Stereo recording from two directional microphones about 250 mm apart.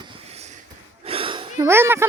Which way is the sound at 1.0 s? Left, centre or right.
Right.